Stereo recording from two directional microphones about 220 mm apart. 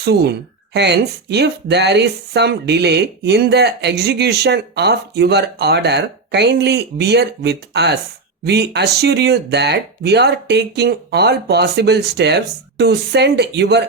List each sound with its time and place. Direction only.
0.0 s speech: 50° right (ahead or behind)